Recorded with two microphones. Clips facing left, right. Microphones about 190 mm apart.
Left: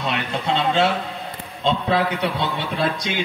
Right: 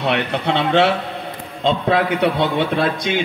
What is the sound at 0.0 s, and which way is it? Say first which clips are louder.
A man's voice: right 5 dB; 65° right (ahead or behind).